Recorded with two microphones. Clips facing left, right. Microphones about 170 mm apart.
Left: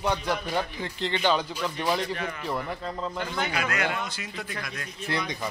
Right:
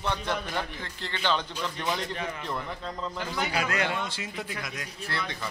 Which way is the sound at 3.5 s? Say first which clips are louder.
Right 2 dB; 35° right (ahead or behind).